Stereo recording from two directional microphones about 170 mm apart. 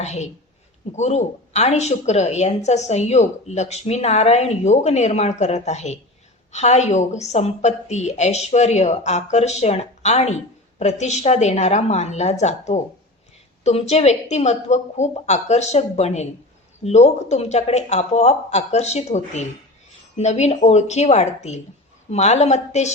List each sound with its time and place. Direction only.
0.0 s a woman's voice: 40° left (ahead or behind)